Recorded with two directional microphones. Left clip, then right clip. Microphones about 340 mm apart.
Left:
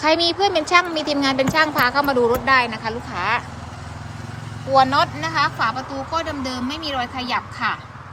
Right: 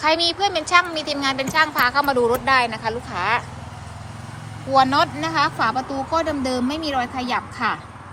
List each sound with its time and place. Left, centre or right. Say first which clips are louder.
0.0 s a woman's voice: left 1 dB; centre
4.7 s speech: left 1 dB; centre